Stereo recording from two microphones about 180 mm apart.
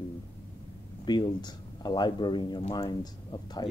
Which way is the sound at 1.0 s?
25° left (ahead or behind).